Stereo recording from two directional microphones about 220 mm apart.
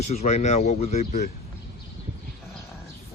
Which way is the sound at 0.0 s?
30° left (ahead or behind).